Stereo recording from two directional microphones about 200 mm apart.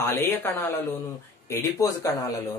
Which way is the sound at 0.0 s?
10° left (ahead or behind).